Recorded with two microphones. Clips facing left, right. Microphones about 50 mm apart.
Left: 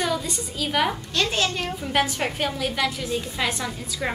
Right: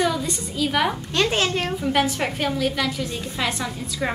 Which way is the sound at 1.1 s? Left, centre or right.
Right.